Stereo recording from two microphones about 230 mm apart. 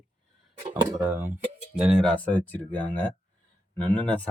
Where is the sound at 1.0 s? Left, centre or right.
Centre.